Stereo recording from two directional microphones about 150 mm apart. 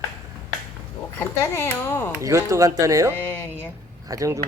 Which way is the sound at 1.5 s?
15° left (ahead or behind).